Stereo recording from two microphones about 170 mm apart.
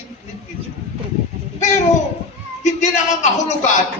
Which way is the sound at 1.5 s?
40° left (ahead or behind).